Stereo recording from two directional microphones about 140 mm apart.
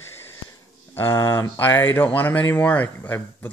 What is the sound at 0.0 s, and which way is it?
Wheeze, 15° left (ahead or behind).